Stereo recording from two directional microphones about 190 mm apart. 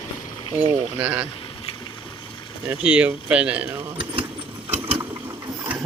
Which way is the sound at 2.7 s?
5° right (ahead or behind).